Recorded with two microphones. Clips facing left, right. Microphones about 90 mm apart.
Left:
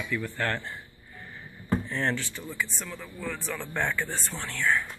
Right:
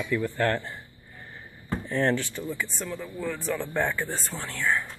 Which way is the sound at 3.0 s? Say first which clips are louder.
Right 2 dB; 20° right (ahead or behind).